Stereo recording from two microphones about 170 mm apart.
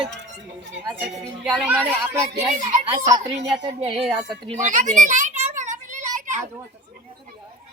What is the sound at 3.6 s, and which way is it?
Speech, 30° right (ahead or behind).